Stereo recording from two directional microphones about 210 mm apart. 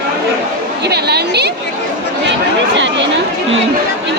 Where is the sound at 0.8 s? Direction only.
50° right (ahead or behind).